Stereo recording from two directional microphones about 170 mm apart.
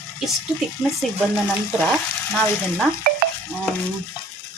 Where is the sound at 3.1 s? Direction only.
55° right (ahead or behind).